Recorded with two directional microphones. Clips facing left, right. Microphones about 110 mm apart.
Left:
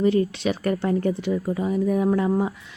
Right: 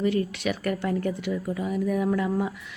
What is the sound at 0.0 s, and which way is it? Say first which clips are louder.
A woman's voice: left 5 dB; 30° left (ahead or behind).